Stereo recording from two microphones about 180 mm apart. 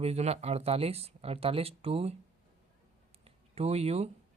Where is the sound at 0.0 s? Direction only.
35° right (ahead or behind).